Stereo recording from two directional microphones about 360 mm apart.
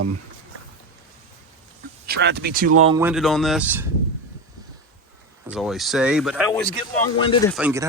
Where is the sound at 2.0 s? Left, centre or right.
Right.